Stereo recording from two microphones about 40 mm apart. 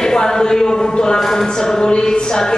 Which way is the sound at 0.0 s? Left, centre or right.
Centre.